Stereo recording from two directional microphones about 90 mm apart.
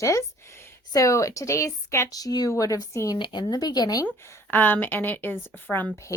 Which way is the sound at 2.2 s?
45° left (ahead or behind).